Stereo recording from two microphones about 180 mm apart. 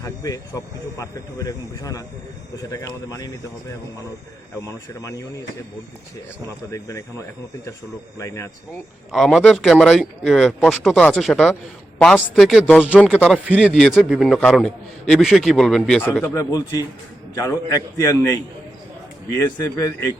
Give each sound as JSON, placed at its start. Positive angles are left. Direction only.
{"t": 0.0, "sound": "speech", "side_deg": 20}
{"t": 4.6, "sound": "a man's voice", "side_deg": 15}
{"t": 6.7, "sound": "a man's voice", "side_deg": 15}
{"t": 9.1, "sound": "a man's voice", "side_deg": 0}